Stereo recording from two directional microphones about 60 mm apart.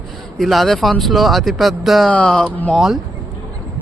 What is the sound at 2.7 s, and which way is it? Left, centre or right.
Speech, centre.